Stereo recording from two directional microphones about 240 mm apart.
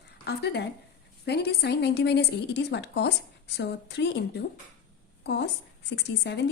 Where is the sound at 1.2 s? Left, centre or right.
Left.